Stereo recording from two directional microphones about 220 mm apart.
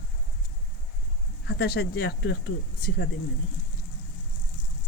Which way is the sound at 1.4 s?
50° left (ahead or behind).